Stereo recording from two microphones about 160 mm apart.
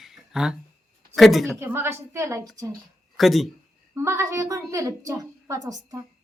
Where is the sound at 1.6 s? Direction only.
15° right (ahead or behind).